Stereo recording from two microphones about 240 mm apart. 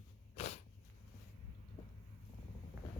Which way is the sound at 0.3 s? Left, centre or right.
Left.